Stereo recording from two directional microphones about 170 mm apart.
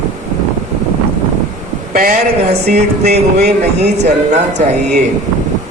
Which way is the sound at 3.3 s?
40° right (ahead or behind).